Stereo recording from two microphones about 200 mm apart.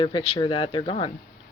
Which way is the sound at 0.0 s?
25° left (ahead or behind).